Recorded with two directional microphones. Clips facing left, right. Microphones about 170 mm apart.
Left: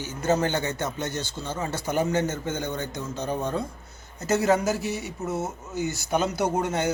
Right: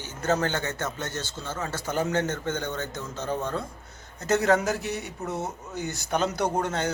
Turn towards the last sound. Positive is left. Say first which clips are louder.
# left 2 dB
turn(degrees=10)  # may be behind; listen again after turning